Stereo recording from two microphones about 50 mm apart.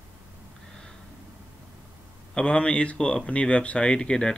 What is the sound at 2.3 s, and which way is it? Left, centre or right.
Speech, centre.